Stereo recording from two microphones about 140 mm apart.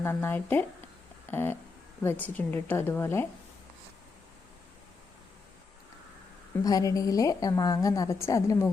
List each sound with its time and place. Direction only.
0.0 s a woman's voice: 15° left (ahead or behind)
6.7 s a woman's voice: 25° left (ahead or behind)